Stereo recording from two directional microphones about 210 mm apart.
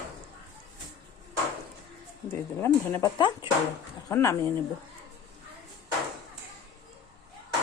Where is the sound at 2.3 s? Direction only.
10° left (ahead or behind).